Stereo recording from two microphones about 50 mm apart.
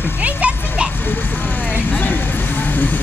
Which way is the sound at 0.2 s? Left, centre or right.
Right.